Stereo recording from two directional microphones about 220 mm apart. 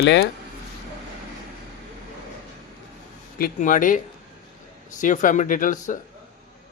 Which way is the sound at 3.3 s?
40° left (ahead or behind).